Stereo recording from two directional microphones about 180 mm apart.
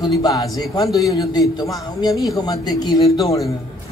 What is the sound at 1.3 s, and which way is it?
Speech, 20° left (ahead or behind).